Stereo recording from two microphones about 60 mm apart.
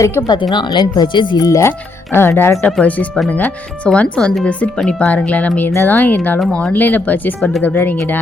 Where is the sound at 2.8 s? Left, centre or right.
Left.